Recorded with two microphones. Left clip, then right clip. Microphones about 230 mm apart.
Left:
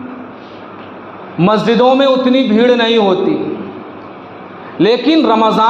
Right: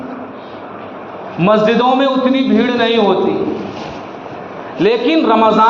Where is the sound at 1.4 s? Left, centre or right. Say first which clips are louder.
Even; left.